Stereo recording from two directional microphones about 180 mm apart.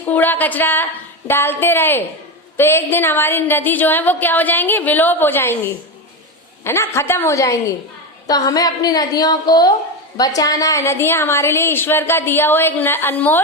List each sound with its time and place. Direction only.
0.0 s a woman's voice: 10° left (ahead or behind)